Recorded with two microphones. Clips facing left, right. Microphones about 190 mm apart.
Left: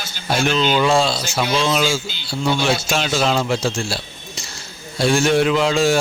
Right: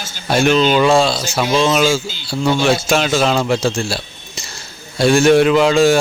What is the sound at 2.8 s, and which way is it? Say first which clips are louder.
Speech: right 4 dB; 65° right (ahead or behind).